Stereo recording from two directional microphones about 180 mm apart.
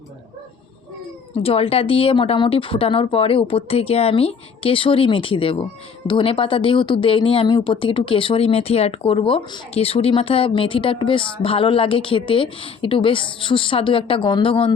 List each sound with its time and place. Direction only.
1.4 s speech: 35° left (ahead or behind)